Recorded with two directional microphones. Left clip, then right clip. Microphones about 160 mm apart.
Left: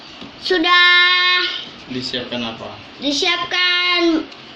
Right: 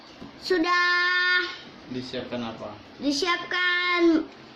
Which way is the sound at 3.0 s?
60° right (ahead or behind).